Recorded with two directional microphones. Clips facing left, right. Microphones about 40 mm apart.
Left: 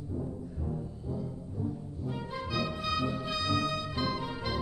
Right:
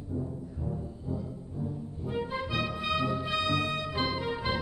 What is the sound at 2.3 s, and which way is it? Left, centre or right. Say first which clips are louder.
Music: right 2 dB; right.